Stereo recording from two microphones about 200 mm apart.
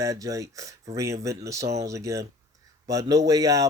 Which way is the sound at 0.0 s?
15° right (ahead or behind).